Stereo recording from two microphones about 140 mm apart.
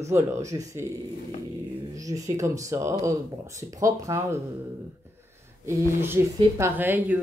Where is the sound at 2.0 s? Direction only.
25° right (ahead or behind).